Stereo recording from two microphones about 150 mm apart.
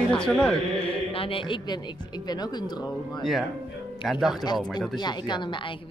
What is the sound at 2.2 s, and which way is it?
Chant, 30° left (ahead or behind).